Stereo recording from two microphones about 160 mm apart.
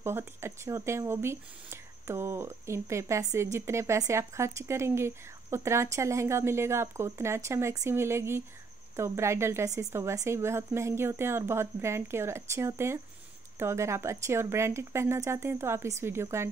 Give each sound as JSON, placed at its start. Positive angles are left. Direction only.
{"t": 0.0, "sound": "speech", "side_deg": -15}